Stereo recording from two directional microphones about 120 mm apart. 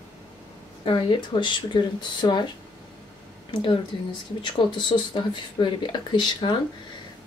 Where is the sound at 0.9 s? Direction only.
40° left (ahead or behind).